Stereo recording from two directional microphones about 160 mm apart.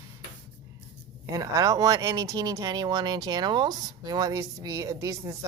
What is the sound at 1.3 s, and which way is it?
Speech, 20° right (ahead or behind).